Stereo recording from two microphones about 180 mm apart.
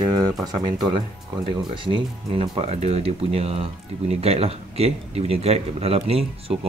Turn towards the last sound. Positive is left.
turn(degrees=-35)  # may be behind; listen again after turning